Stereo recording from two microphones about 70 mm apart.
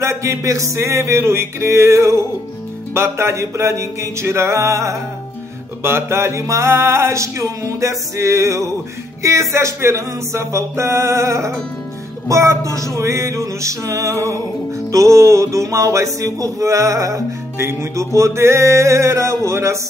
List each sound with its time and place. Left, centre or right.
0.0 s music: right
5.8 s music: right